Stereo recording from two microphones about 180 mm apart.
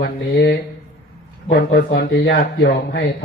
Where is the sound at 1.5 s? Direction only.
60° left (ahead or behind).